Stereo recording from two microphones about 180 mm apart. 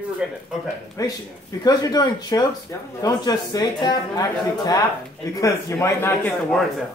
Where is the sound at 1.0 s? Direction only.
20° left (ahead or behind).